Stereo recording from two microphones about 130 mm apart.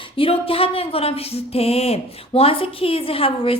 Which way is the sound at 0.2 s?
45° left (ahead or behind).